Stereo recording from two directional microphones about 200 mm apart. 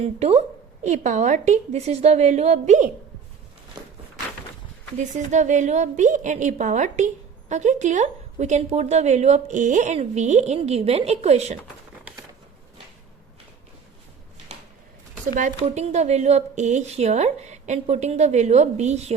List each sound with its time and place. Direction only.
0.0 s a woman's voice: 30° right (ahead or behind)
4.9 s a woman's voice: 35° right (ahead or behind)
15.4 s a woman's voice: 40° right (ahead or behind)